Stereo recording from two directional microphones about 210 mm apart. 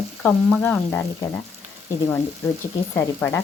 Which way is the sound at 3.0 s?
10° left (ahead or behind).